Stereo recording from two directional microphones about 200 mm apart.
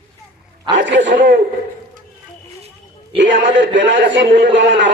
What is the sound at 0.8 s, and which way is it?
Speech, 65° right (ahead or behind).